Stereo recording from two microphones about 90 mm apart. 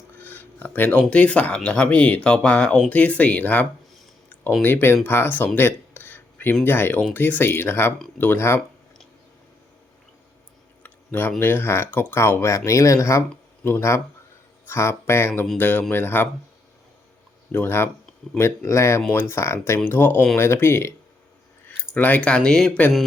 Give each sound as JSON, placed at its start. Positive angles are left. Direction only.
{"t": 0.2, "sound": "speech", "side_deg": 20}
{"t": 5.5, "sound": "a sound", "side_deg": 25}
{"t": 6.7, "sound": "speech", "side_deg": 25}
{"t": 10.8, "sound": "speech", "side_deg": 20}
{"t": 17.5, "sound": "speech", "side_deg": 25}